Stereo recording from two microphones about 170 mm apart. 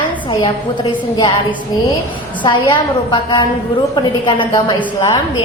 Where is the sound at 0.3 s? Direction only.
30° left (ahead or behind).